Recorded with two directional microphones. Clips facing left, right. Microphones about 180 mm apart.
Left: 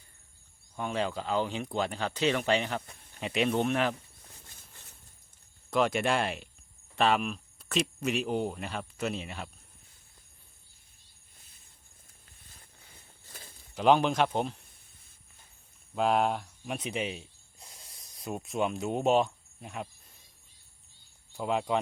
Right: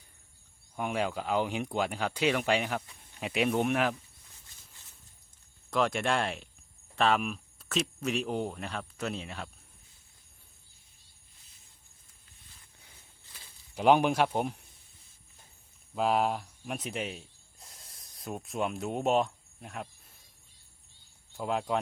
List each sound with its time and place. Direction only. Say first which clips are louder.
0.8 s speech: even; 10° right (ahead or behind)
5.7 s speech: left 1 dB; centre (ahead or behind)
13.7 s speech: even; 10° right (ahead or behind)
16.0 s speech: left 1 dB; centre (ahead or behind)
21.3 s speech: left 2 dB; centre (ahead or behind)